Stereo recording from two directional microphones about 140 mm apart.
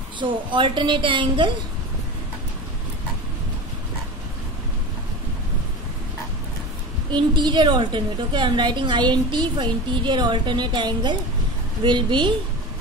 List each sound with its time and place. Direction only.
0.2 s a woman's voice: 35° right (ahead or behind)
7.1 s a woman's voice: 35° right (ahead or behind)